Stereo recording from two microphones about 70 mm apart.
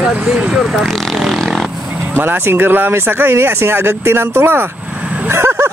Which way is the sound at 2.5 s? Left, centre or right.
Right.